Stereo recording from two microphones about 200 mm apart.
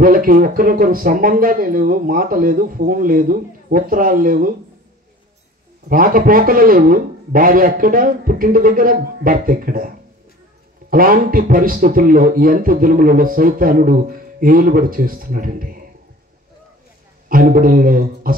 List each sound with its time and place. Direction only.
0.0 s a man's voice: 45° right (ahead or behind)
5.9 s a man's voice: 45° right (ahead or behind)
17.3 s a man's voice: 45° right (ahead or behind)